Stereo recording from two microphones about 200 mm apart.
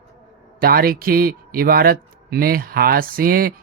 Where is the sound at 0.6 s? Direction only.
50° right (ahead or behind).